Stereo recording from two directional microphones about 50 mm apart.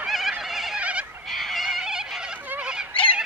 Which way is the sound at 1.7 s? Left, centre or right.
Centre.